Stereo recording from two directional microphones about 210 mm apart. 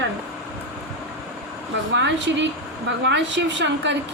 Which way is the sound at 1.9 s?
60° right (ahead or behind).